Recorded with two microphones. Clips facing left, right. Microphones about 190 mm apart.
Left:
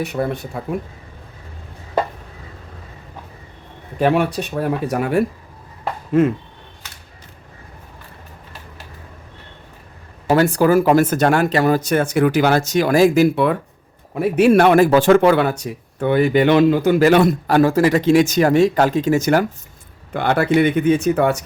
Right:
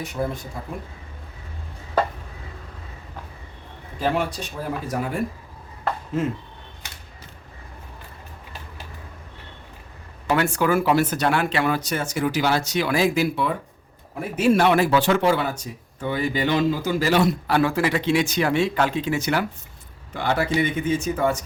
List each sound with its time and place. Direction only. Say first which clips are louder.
0.0 s speech: left 5 dB; 65° left (ahead or behind)
3.9 s speech: left 7 dB; 60° left (ahead or behind)
10.2 s speech: left 7 dB; 40° left (ahead or behind)
20.1 s speech: left 6 dB; 60° left (ahead or behind)